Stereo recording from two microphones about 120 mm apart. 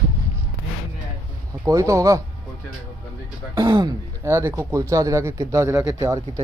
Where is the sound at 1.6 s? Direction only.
25° right (ahead or behind).